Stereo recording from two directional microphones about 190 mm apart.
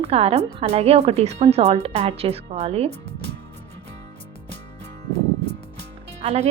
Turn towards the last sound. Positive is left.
turn(degrees=-35)  # may be behind; listen again after turning